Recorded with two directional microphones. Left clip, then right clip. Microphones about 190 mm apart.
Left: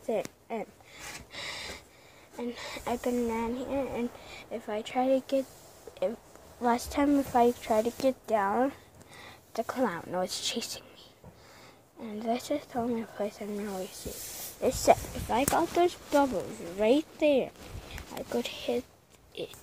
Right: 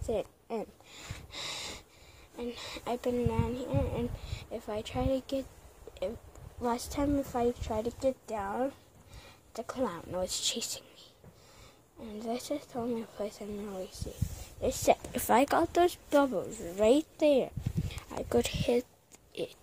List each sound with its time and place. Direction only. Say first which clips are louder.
0.1 s a sound: left 2 dB; 35° right (ahead or behind)
2.3 s speech: left 2 dB; 25° right (ahead or behind)
6.6 s a woman's voice: left 5 dB; 10° right (ahead or behind)
12.0 s a woman's voice: left 5 dB; 15° right (ahead or behind)
15.3 s speech: right 1 dB; 35° right (ahead or behind)
15.7 s a woman's voice: even; 20° right (ahead or behind)
18.1 s speech: right 3 dB; 35° right (ahead or behind)